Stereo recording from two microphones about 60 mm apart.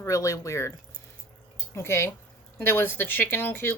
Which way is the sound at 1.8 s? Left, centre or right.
Left.